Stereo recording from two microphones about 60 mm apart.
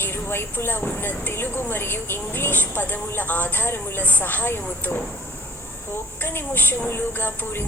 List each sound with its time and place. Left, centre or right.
0.0 s a woman's voice: left
6.2 s a woman's voice: left